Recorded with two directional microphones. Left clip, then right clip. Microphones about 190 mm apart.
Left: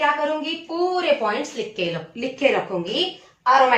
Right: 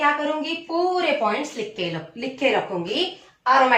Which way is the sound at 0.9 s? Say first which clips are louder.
Left 1 dB; 15° left (ahead or behind).